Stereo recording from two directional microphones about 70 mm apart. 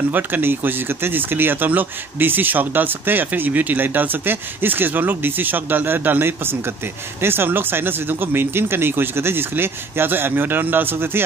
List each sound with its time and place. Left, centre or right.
0.1 s speech: right